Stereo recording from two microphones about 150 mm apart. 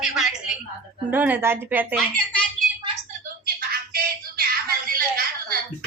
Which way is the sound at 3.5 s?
80° right.